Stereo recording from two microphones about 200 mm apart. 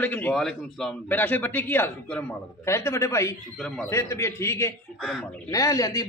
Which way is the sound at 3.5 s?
5° left (ahead or behind).